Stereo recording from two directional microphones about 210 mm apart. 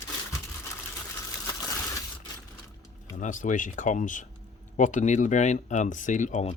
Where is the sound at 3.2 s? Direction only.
40° left (ahead or behind).